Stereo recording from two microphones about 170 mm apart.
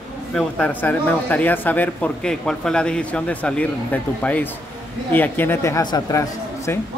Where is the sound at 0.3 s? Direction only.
10° left (ahead or behind).